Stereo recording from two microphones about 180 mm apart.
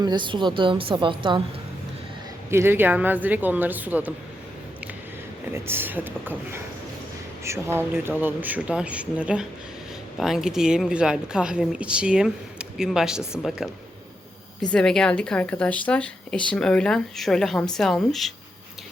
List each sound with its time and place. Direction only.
0.0 s speech: 25° right (ahead or behind)
2.5 s speech: 15° right (ahead or behind)
5.5 s a woman's voice: 15° right (ahead or behind)
14.7 s a woman's voice: 5° left (ahead or behind)